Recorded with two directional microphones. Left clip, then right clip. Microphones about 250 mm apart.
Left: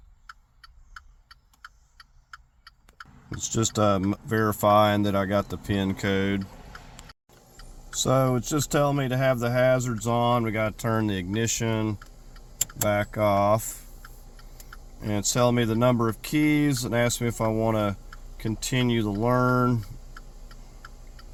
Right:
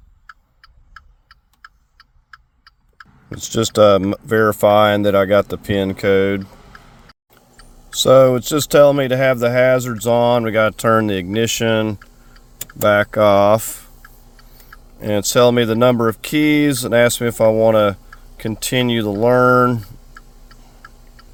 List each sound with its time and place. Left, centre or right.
3.2 s speech: right
6.6 s liquid: right
7.9 s speech: right
14.9 s speech: right